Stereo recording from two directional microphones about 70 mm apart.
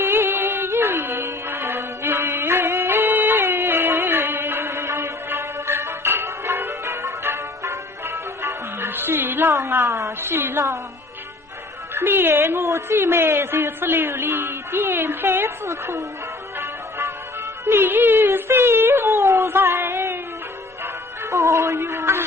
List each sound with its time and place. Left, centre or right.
0.0 s music: right
9.6 s a sound: right
11.9 s a woman's voice: right
17.7 s wail: right
20.8 s music: right